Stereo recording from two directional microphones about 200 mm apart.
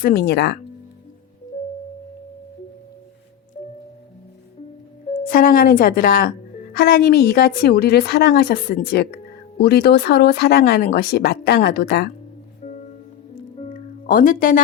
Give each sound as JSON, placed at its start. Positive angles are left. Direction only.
{"t": 0.0, "sound": "speech", "side_deg": 50}
{"t": 3.6, "sound": "squish", "side_deg": 35}
{"t": 5.1, "sound": "speech", "side_deg": 45}
{"t": 12.6, "sound": "music", "side_deg": 35}